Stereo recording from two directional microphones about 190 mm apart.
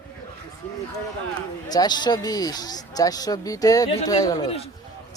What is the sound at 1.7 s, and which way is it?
Speech, 20° left (ahead or behind).